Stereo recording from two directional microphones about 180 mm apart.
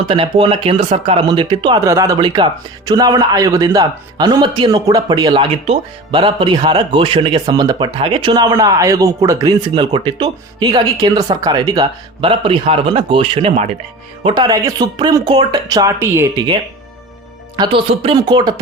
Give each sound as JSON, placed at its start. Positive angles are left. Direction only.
{"t": 0.1, "sound": "speech", "side_deg": -30}
{"t": 17.6, "sound": "speech", "side_deg": -25}